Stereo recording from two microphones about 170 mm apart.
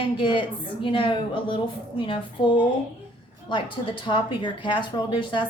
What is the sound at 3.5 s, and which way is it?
A woman's voice, 30° left (ahead or behind).